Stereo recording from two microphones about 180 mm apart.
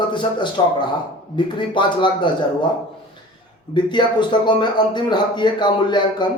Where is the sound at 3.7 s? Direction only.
25° left (ahead or behind).